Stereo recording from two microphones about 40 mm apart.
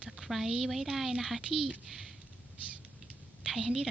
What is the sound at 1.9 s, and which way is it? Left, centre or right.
Speech, centre.